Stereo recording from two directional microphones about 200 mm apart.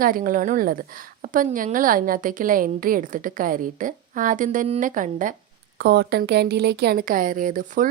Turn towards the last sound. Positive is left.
turn(degrees=-40)  # may be behind; listen again after turning